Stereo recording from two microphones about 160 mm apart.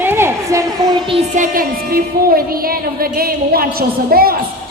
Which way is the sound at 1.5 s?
65° right (ahead or behind).